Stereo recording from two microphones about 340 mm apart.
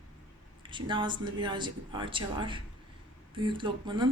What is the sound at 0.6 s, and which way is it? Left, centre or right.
Speech, centre.